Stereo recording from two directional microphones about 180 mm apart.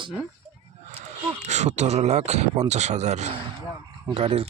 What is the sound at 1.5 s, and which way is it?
Speech, 40° right (ahead or behind).